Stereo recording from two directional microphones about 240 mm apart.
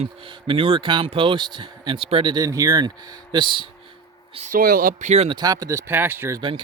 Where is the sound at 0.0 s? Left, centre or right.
Right.